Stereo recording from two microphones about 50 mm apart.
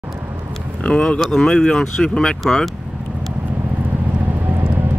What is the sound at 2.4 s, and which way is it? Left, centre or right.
Speech, centre.